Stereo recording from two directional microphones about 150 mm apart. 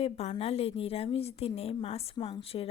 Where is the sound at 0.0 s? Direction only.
40° left (ahead or behind).